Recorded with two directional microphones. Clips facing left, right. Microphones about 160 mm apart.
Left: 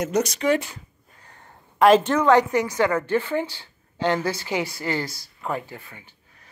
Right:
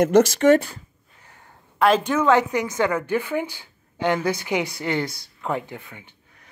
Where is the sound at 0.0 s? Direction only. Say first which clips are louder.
Right 7 dB; 55° right (ahead or behind).